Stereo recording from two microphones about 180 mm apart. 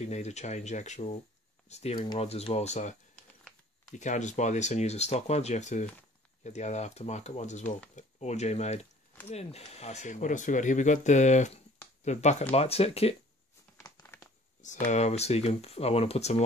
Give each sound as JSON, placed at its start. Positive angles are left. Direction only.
{"t": 0.0, "sound": "speech", "side_deg": 40}
{"t": 13.7, "sound": "crumpling", "side_deg": 15}
{"t": 14.9, "sound": "speech", "side_deg": 35}